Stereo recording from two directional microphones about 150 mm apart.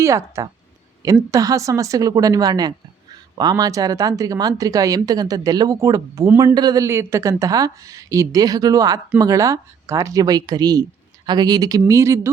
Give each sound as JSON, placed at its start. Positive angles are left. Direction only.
{"t": 0.0, "sound": "speech", "side_deg": -20}